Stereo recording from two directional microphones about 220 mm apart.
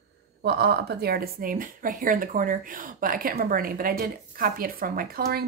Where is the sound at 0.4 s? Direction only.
45° right (ahead or behind).